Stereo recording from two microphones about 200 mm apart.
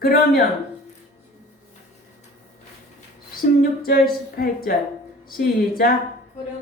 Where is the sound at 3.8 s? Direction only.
50° left (ahead or behind).